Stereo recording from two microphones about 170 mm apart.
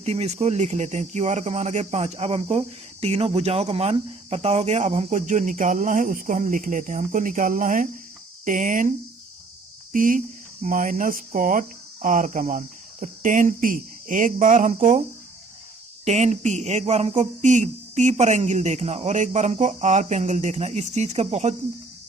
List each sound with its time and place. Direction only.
0.0 s speech: 40° right (ahead or behind)
16.0 s speech: 40° right (ahead or behind)